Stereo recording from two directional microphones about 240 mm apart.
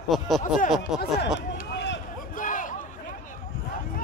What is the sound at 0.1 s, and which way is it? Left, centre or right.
Speech, centre.